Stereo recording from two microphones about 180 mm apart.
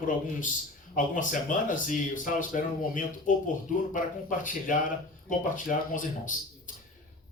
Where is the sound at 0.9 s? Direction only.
45° left (ahead or behind).